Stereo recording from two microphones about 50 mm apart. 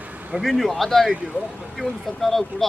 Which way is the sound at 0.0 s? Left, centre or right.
Right.